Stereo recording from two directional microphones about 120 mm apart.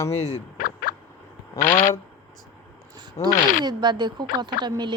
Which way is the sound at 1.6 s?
90° left.